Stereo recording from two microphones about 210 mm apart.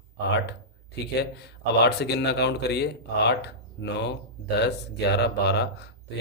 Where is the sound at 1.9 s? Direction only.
50° left (ahead or behind).